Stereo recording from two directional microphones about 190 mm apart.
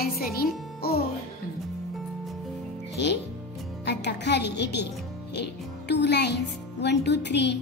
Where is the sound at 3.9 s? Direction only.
65° left (ahead or behind).